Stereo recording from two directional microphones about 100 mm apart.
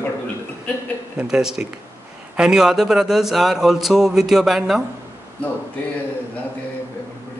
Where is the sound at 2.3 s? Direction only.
5° right (ahead or behind).